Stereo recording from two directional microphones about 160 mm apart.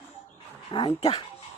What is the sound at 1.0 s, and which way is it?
Speech, 35° left (ahead or behind).